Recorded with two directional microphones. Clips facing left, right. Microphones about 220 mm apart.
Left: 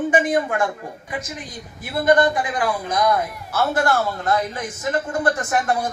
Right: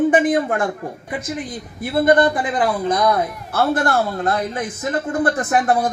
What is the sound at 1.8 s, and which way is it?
A man's voice, 55° right (ahead or behind).